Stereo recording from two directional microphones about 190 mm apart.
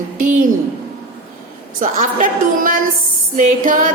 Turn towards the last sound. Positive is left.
turn(degrees=-45)  # may be behind; listen again after turning